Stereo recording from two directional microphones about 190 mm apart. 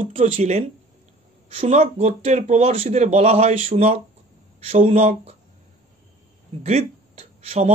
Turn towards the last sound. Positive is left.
turn(degrees=-35)  # may be behind; listen again after turning